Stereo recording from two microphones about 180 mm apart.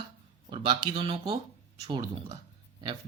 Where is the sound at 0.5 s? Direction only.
25° right (ahead or behind).